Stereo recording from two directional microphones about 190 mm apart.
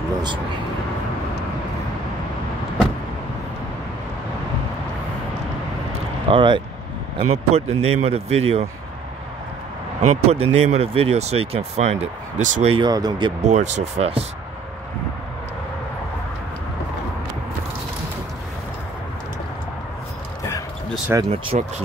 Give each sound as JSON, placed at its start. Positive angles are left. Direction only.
{"t": 6.2, "sound": "speech", "side_deg": -25}
{"t": 10.0, "sound": "speech", "side_deg": -30}
{"t": 13.4, "sound": "speech", "side_deg": -35}
{"t": 20.4, "sound": "basketball bounce", "side_deg": 20}
{"t": 21.3, "sound": "speech", "side_deg": -35}